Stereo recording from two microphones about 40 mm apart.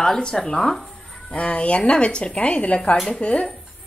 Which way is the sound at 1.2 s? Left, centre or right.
Left.